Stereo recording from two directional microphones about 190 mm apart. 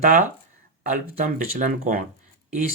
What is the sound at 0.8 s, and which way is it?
Speech, 45° right (ahead or behind).